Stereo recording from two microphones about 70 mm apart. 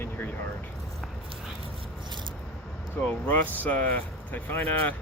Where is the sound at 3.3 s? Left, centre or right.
Left.